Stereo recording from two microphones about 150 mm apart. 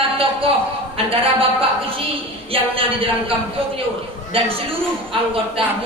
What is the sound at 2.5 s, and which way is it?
Speech, 35° right (ahead or behind).